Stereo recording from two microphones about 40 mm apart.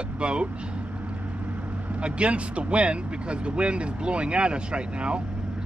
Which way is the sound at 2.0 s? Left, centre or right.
Right.